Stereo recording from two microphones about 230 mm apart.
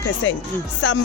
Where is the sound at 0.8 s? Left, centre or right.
Left.